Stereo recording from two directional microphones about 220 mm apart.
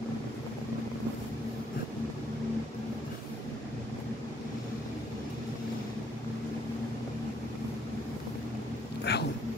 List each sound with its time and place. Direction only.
9.1 s cat: 50° left (ahead or behind)